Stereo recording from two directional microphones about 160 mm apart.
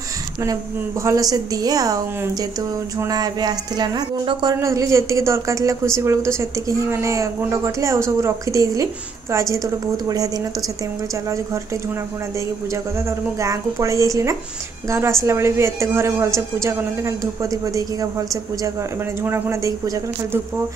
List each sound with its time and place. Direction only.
1.0 s a woman's voice: 20° right (ahead or behind)
3.0 s a woman's voice: 25° right (ahead or behind)
13.4 s a woman's voice: 20° right (ahead or behind)